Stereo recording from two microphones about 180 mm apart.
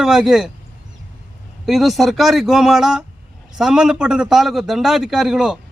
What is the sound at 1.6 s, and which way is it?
Speech, centre (ahead or behind).